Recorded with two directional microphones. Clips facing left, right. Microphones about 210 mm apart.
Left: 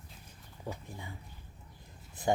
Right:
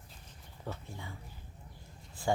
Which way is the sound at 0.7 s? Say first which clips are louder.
Left 1 dB; 15° left (ahead or behind).